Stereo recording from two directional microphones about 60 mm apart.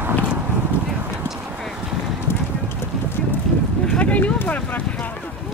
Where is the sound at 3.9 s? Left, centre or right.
Left.